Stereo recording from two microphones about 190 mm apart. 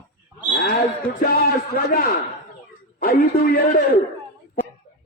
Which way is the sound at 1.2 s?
50° left (ahead or behind).